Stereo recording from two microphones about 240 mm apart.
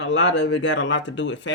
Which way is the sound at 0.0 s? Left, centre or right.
Left.